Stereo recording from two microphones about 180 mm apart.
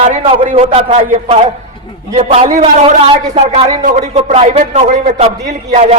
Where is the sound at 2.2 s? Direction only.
35° right (ahead or behind).